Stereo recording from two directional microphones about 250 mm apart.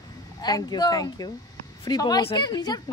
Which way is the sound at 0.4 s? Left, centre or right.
Centre.